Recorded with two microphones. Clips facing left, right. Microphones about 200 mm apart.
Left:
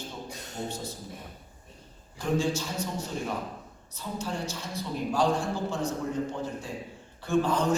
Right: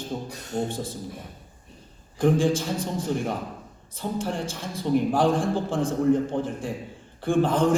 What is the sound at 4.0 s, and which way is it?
A man's voice, 55° right (ahead or behind).